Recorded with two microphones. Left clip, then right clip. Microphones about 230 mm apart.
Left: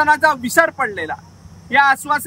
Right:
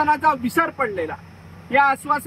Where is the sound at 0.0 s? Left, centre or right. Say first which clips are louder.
Left 4 dB; left.